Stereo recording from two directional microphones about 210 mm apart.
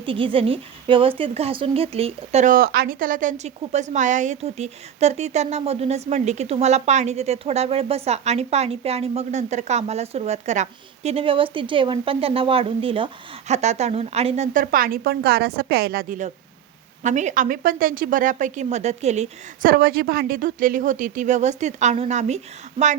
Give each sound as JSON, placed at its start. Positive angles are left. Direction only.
{"t": 0.0, "sound": "speech", "side_deg": -25}